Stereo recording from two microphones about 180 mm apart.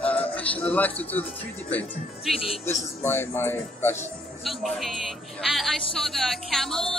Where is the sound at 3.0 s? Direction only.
10° left (ahead or behind).